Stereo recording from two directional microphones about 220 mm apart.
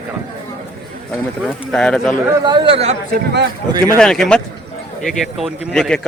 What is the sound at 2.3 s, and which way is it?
Speech, 20° right (ahead or behind).